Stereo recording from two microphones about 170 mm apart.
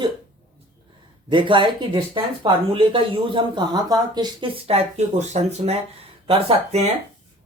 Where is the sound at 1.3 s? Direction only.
30° right (ahead or behind).